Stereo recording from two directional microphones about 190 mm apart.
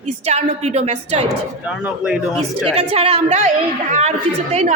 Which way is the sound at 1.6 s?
5° right (ahead or behind).